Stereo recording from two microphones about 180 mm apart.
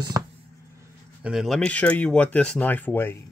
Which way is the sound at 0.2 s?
15° right (ahead or behind).